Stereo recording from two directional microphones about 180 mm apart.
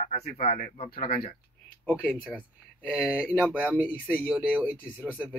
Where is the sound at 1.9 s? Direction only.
10° left (ahead or behind).